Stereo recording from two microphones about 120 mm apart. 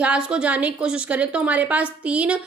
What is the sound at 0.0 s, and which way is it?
A woman's voice, 10° right (ahead or behind).